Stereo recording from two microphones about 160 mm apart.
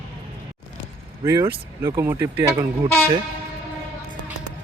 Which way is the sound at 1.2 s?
20° right (ahead or behind).